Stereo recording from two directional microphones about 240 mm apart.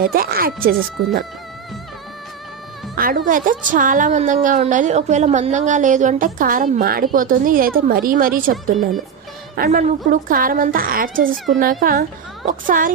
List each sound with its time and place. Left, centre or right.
0.1 s a woman's voice: right
3.0 s a woman's voice: right